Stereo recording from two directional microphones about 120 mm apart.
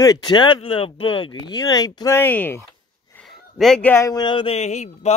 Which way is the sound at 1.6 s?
30° left (ahead or behind).